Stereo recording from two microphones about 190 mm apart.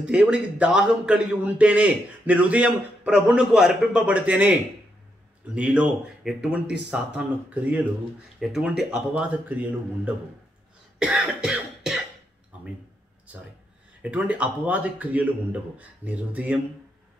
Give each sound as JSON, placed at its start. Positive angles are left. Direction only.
{"t": 0.0, "sound": "a man's voice", "side_deg": -5}
{"t": 11.0, "sound": "cough", "side_deg": -5}
{"t": 14.0, "sound": "speech", "side_deg": -5}